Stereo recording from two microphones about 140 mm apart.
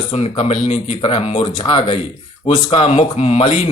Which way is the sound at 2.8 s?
50° left (ahead or behind).